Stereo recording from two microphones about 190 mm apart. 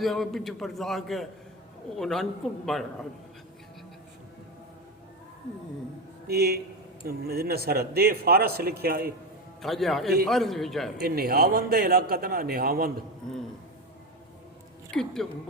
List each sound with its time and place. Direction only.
0.0 s a man's voice: centre (ahead or behind)
6.2 s a man's voice: 55° right (ahead or behind)
9.6 s a man's voice: centre (ahead or behind)
10.9 s a man's voice: 55° right (ahead or behind)
14.8 s speech: 5° left (ahead or behind)